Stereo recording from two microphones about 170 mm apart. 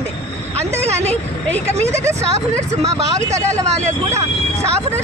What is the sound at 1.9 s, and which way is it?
Speech, 15° right (ahead or behind).